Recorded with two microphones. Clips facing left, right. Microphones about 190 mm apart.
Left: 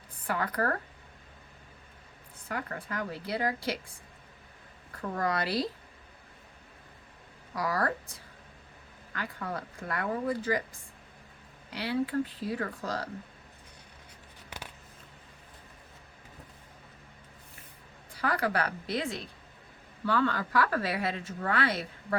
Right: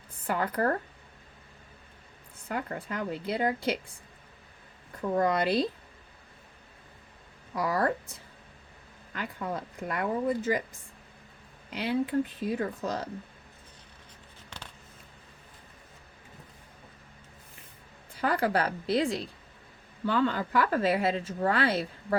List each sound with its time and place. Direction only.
0.3 s a woman's voice: 25° right (ahead or behind)
2.5 s a woman's voice: 25° right (ahead or behind)
5.1 s a woman's voice: 20° right (ahead or behind)
7.5 s a woman's voice: 25° right (ahead or behind)
18.1 s a woman's voice: 25° right (ahead or behind)